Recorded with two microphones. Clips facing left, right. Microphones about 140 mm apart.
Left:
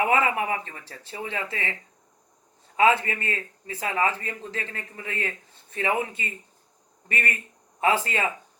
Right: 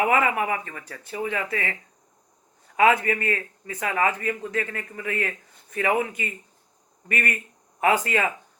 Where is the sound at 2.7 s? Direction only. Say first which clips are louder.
Right 1 dB; 30° left (ahead or behind).